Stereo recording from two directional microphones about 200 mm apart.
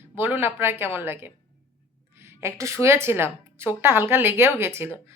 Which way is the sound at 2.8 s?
10° right (ahead or behind).